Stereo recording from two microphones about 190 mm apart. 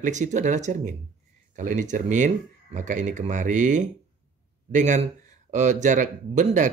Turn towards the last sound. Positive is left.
turn(degrees=-40)  # may be behind; listen again after turning